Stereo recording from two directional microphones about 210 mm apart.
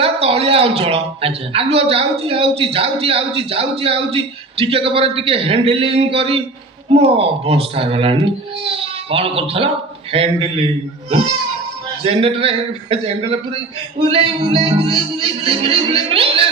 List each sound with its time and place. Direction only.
0.0 s a man's voice: 30° right (ahead or behind)
12.0 s a man's voice: 30° right (ahead or behind)